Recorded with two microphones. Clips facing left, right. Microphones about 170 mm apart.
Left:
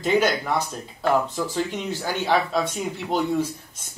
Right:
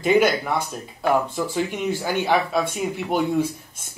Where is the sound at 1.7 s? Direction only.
10° right (ahead or behind).